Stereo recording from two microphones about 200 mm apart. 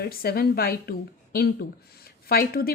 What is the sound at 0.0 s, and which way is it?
A woman's voice, 50° left (ahead or behind).